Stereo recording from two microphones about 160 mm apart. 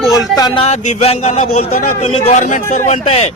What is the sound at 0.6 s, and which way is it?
A man's voice, 45° left (ahead or behind).